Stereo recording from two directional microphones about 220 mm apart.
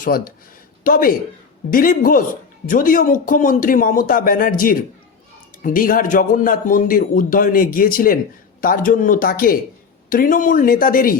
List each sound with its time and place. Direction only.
0.0 s a man's voice: 40° left (ahead or behind)